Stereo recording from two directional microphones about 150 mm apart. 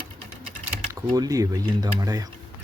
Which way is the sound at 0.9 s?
25° right (ahead or behind).